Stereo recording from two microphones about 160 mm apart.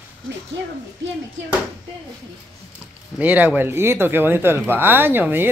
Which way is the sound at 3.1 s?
10° right (ahead or behind).